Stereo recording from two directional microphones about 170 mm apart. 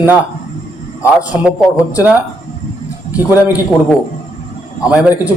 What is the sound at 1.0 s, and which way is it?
A man's voice, 10° right (ahead or behind).